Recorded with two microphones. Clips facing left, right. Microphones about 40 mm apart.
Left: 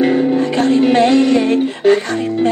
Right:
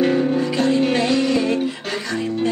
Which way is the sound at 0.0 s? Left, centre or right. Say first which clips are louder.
Left 4 dB; centre.